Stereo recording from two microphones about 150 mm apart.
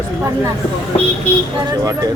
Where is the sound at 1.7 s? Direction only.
25° right (ahead or behind).